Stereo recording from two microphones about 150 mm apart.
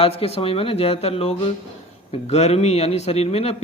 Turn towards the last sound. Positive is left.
turn(degrees=40)  # may be behind; listen again after turning